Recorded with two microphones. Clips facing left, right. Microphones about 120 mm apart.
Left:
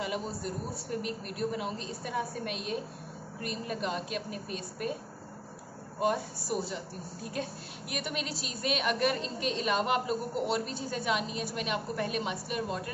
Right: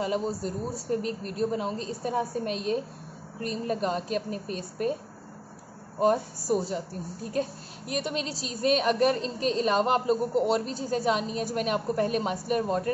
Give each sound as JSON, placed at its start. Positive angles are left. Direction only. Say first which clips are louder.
{"t": 0.0, "sound": "a woman's voice", "louder": "right 6 dB", "side_deg": -35}
{"t": 5.9, "sound": "a woman's voice", "louder": "right 6 dB", "side_deg": -40}